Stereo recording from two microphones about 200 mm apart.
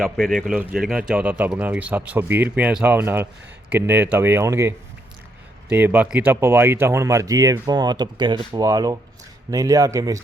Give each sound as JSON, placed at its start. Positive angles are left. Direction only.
{"t": 0.0, "sound": "speech", "side_deg": 0}